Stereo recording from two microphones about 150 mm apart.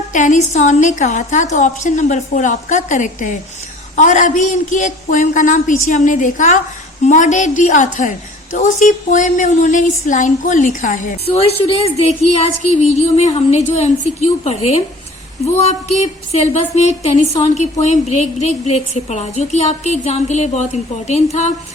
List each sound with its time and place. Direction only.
0.1 s a woman's voice: 55° left (ahead or behind)
11.3 s a woman's voice: 45° left (ahead or behind)